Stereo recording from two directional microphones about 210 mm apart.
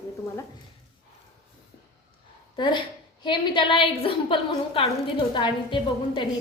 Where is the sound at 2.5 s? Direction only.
20° left (ahead or behind).